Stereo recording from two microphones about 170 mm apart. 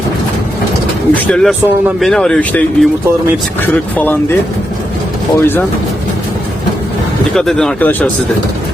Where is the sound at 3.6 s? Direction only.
10° left (ahead or behind).